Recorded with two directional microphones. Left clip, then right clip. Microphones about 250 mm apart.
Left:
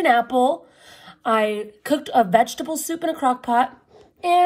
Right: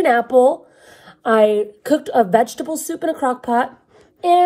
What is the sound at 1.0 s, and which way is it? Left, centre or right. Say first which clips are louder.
Speech: right 6 dB; centre.